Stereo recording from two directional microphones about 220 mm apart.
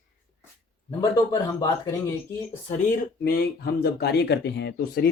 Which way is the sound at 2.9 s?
45° left (ahead or behind).